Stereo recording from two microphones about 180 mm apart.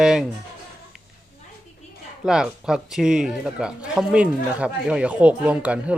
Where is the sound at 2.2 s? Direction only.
5° right (ahead or behind).